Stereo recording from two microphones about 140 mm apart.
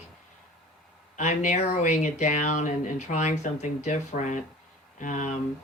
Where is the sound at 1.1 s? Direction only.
60° left (ahead or behind).